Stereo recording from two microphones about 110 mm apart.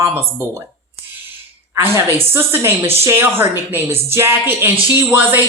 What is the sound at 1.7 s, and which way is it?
Speech, 25° right (ahead or behind).